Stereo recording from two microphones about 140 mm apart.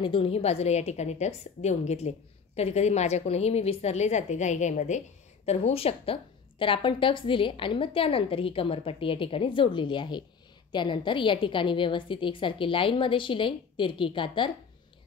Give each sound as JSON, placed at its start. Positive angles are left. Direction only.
{"t": 0.0, "sound": "a woman's voice", "side_deg": 40}